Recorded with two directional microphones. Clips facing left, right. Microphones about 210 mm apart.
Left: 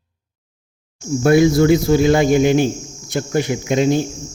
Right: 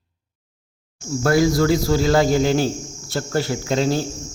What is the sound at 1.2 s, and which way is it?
Cricket, 20° left (ahead or behind).